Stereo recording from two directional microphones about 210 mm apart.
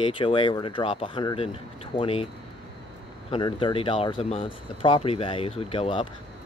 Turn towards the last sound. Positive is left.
turn(degrees=25)  # may be behind; listen again after turning